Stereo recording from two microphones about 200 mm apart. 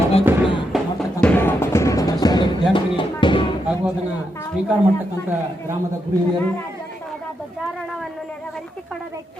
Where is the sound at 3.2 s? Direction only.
25° left (ahead or behind).